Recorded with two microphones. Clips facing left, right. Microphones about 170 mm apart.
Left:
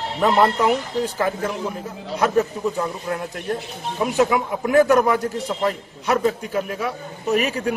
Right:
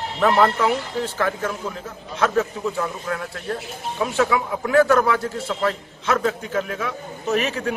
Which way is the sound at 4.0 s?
15° left (ahead or behind).